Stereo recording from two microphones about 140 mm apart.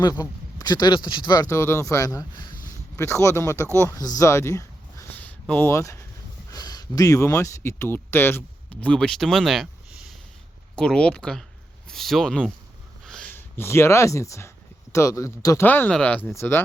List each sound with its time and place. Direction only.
0.2 s speech: 25° left (ahead or behind)
2.9 s speech: 20° left (ahead or behind)
6.5 s a sound: 25° left (ahead or behind)
7.4 s speech: 20° left (ahead or behind)
13.1 s a sound: 5° left (ahead or behind)
13.3 s speech: 15° left (ahead or behind)